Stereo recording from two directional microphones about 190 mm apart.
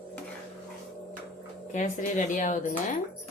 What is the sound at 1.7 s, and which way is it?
Speech, 40° left (ahead or behind).